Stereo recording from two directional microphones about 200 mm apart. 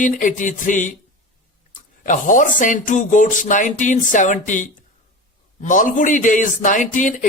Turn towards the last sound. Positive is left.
turn(degrees=40)  # may be behind; listen again after turning